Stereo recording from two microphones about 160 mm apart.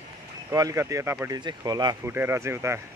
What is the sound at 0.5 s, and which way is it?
Speech, 20° right (ahead or behind).